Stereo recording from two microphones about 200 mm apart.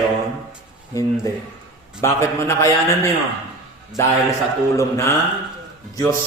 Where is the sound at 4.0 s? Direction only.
10° left (ahead or behind).